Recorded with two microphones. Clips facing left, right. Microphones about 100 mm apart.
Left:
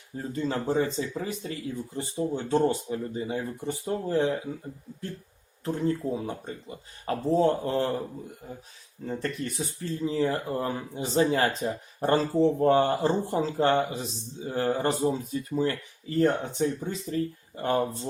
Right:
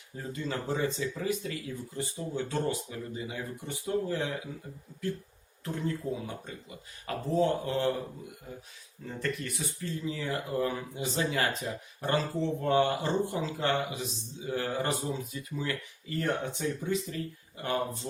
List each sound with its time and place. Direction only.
0.2 s speech: 35° left (ahead or behind)
5.6 s speech: 30° left (ahead or behind)
9.0 s speech: 30° left (ahead or behind)